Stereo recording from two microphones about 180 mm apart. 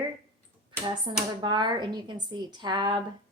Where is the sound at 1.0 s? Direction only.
25° right (ahead or behind).